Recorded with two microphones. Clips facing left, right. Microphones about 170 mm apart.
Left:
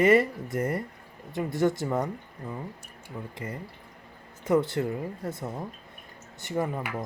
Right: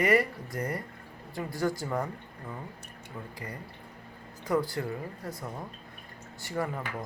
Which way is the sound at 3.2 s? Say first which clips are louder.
Left 4 dB; 15° left (ahead or behind).